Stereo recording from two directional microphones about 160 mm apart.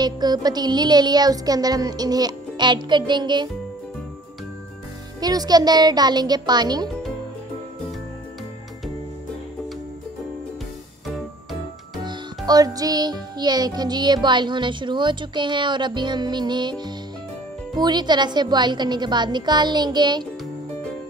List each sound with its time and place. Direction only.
0.0 s music: 25° right (ahead or behind)
5.2 s music: 25° right (ahead or behind)
12.0 s music: 25° right (ahead or behind)